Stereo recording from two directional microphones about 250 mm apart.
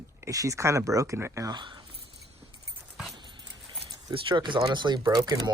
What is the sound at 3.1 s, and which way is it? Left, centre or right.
Dog, centre.